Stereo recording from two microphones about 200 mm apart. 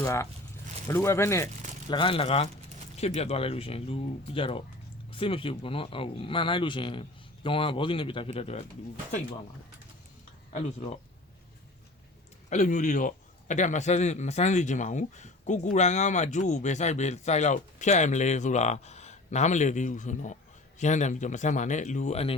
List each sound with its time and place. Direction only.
0.0 s speech: 15° left (ahead or behind)
1.9 s speech: 25° left (ahead or behind)
10.5 s speech: 30° left (ahead or behind)
12.5 s speech: 35° left (ahead or behind)